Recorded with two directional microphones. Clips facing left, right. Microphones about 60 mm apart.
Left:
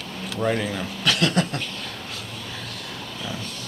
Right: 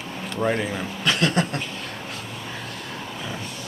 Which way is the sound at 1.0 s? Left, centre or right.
Right.